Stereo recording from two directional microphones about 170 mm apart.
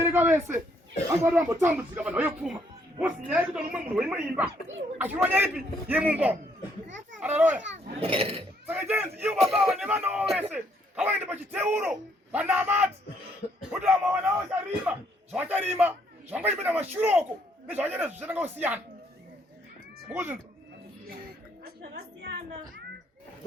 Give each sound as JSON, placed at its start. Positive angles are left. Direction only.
{"t": 0.0, "sound": "speech", "side_deg": -15}
{"t": 7.9, "sound": "a child's voice", "side_deg": -35}
{"t": 8.6, "sound": "a man's voice", "side_deg": -10}
{"t": 20.1, "sound": "speech", "side_deg": -10}
{"t": 21.6, "sound": "a sound", "side_deg": -75}